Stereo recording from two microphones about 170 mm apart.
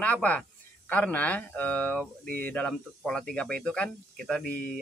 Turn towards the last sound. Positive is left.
turn(degrees=5)  # may be behind; listen again after turning